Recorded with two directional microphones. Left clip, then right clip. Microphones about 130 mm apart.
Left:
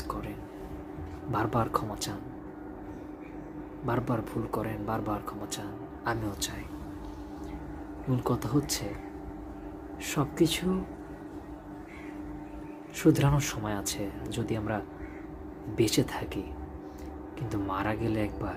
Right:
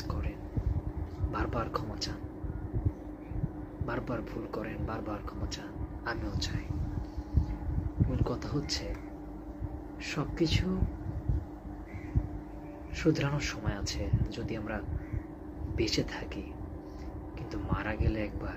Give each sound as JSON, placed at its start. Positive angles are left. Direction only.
{"t": 1.3, "sound": "speech", "side_deg": 25}
{"t": 3.8, "sound": "speech", "side_deg": 25}
{"t": 8.2, "sound": "speech", "side_deg": 30}
{"t": 10.3, "sound": "speech", "side_deg": 25}
{"t": 13.0, "sound": "speech", "side_deg": 25}
{"t": 15.8, "sound": "speech", "side_deg": 25}
{"t": 17.5, "sound": "speech", "side_deg": 25}